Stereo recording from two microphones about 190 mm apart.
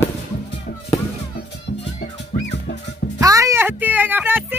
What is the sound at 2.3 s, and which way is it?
Music, 50° left (ahead or behind).